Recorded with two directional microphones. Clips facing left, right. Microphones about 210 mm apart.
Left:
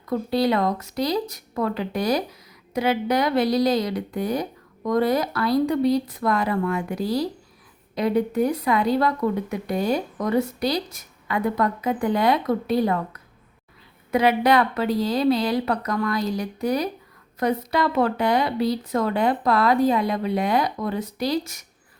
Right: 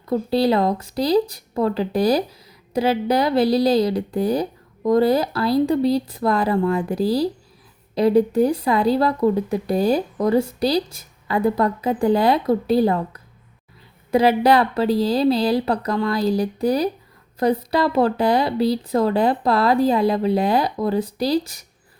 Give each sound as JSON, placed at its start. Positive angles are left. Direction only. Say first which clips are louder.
{"t": 0.0, "sound": "speech", "louder": "right 3 dB", "side_deg": -30}